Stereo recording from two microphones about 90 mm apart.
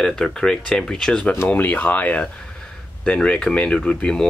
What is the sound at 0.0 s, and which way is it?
Speech, 5° left (ahead or behind).